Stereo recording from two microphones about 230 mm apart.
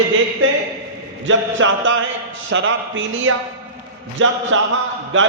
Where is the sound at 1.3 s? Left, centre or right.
Right.